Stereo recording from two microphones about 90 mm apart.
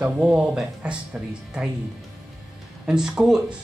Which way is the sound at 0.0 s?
10° right (ahead or behind).